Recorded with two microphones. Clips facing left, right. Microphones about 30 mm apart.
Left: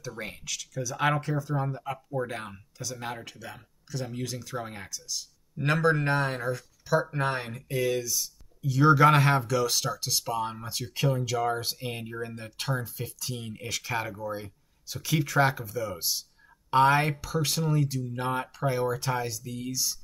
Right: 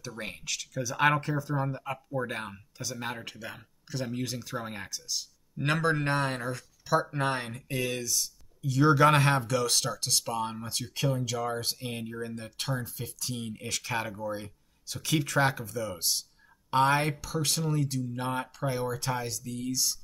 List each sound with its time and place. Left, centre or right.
0.2 s speech: centre
1.3 s speech: centre
5.6 s speech: centre